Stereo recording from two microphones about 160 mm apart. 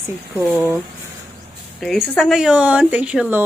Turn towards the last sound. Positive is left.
turn(degrees=-10)  # may be behind; listen again after turning